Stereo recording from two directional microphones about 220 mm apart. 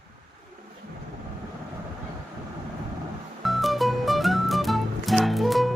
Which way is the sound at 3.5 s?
Centre (ahead or behind).